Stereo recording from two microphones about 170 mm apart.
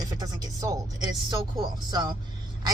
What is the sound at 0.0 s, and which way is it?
Music, 20° right (ahead or behind).